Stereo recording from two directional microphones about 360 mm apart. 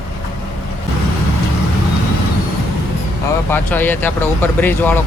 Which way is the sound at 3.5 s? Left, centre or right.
Centre.